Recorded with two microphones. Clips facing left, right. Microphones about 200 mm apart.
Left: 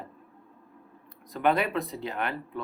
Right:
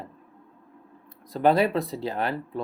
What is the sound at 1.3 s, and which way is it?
Speech, 35° right (ahead or behind).